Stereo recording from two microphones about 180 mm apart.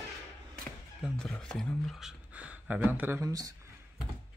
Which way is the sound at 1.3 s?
5° left (ahead or behind).